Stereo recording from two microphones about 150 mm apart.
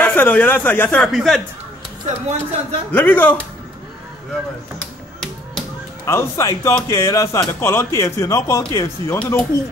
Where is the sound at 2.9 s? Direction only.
10° left (ahead or behind).